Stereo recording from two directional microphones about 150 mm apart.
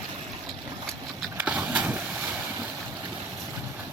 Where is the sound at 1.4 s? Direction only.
10° right (ahead or behind).